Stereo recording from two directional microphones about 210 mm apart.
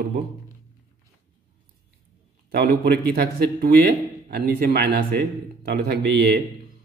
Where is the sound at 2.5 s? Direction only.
45° right (ahead or behind).